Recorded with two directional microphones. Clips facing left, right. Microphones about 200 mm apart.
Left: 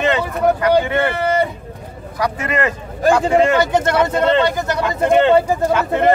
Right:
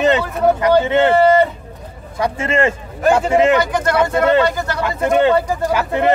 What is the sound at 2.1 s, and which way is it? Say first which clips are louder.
Speech: right 2 dB; 25° right (ahead or behind).